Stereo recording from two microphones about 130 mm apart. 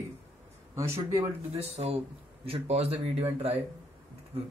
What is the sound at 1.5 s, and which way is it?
Speech, 50° right (ahead or behind).